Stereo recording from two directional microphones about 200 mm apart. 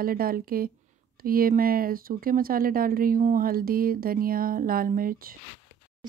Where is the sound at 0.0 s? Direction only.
45° right (ahead or behind).